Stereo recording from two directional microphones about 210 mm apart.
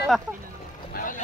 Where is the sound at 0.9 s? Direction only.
40° left (ahead or behind).